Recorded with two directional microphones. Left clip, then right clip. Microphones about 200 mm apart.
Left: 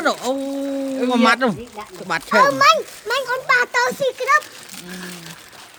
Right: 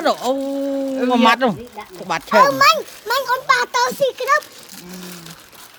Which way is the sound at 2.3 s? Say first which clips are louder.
Right 1 dB; 25° right (ahead or behind).